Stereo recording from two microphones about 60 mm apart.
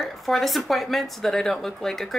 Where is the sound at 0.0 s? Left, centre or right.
Centre.